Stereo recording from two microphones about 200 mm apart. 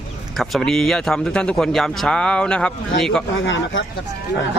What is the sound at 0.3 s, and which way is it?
A man's voice, centre (ahead or behind).